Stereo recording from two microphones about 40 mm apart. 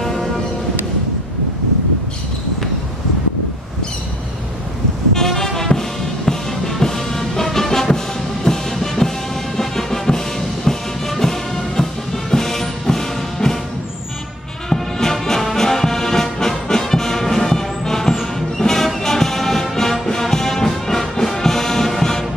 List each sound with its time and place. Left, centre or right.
0.0 s music: centre
5.1 s music: centre
14.7 s brass instrument: centre
18.6 s music: centre